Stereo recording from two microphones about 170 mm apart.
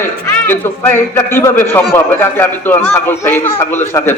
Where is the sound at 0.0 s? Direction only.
15° left (ahead or behind).